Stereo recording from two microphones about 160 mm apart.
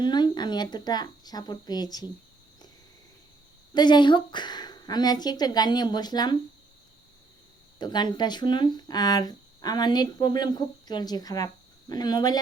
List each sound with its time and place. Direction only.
0.0 s speech: 25° left (ahead or behind)
3.8 s speech: 30° left (ahead or behind)
7.8 s speech: 25° left (ahead or behind)